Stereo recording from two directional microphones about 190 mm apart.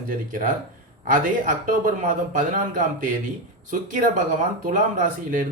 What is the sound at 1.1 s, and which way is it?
Speech, 45° right (ahead or behind).